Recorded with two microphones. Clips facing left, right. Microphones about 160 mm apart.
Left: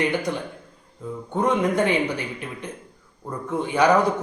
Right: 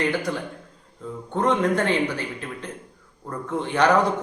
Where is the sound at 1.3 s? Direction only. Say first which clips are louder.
Even; 10° left (ahead or behind).